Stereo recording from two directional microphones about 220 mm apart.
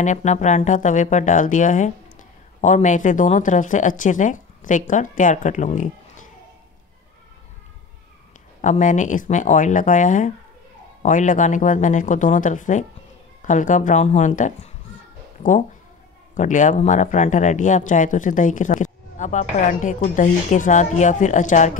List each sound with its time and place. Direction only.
0.0 s speech: 35° left (ahead or behind)
8.5 s speech: 35° left (ahead or behind)
16.3 s speech: 35° left (ahead or behind)